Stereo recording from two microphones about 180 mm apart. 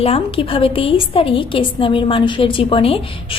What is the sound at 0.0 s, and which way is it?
A woman's voice, 30° left (ahead or behind).